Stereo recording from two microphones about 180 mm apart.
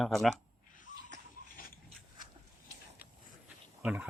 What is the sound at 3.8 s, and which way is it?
Speech, 5° right (ahead or behind).